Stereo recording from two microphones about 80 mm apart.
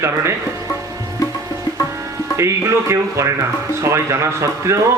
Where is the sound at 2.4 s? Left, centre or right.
Right.